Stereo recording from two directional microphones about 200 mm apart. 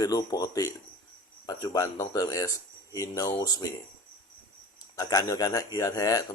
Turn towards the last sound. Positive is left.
turn(degrees=15)  # may be behind; listen again after turning